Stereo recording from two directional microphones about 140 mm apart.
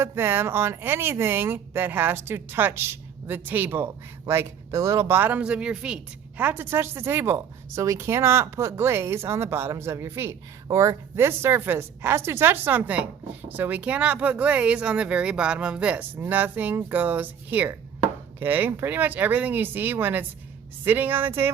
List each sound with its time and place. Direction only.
0.0 s speech: 15° right (ahead or behind)